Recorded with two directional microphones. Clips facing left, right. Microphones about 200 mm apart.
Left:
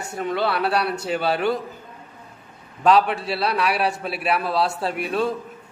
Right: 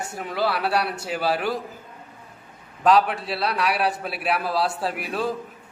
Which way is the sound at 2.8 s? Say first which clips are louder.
Left 1 dB; centre (ahead or behind).